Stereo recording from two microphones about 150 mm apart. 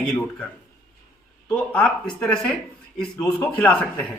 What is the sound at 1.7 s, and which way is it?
Speech, 5° left (ahead or behind).